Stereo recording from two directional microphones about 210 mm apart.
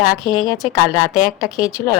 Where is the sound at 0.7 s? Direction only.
Centre (ahead or behind).